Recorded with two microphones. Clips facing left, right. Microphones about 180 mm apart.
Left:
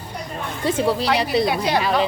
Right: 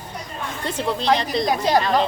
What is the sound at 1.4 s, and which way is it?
Speech, 40° right (ahead or behind).